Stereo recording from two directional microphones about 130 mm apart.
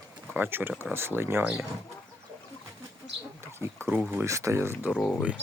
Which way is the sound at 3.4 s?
20° right (ahead or behind).